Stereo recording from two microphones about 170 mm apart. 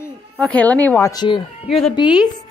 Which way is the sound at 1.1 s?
25° left (ahead or behind).